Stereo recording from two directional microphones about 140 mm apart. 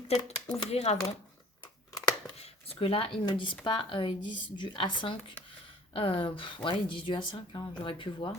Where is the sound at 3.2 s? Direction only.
35° left (ahead or behind).